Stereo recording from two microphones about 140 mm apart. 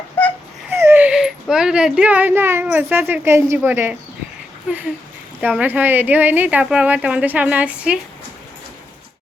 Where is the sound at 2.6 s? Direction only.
15° right (ahead or behind).